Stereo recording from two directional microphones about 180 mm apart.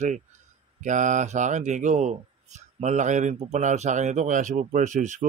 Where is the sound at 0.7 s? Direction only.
45° right (ahead or behind).